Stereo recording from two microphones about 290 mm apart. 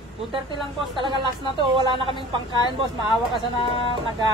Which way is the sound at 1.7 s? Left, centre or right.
Centre.